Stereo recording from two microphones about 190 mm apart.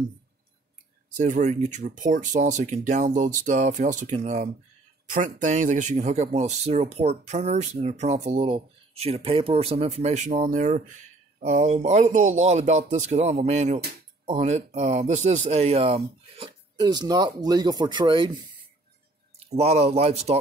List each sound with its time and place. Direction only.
1.1 s speech: 40° right (ahead or behind); by 18.4 s 25° right (ahead or behind)
19.4 s speech: 35° right (ahead or behind)